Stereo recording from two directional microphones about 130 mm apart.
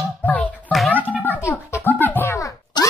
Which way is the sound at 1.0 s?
10° right (ahead or behind).